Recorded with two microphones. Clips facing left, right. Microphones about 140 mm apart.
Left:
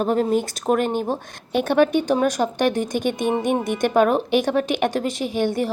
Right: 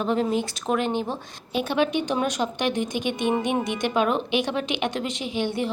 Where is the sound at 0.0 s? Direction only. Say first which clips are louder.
Left 4 dB; 45° left (ahead or behind).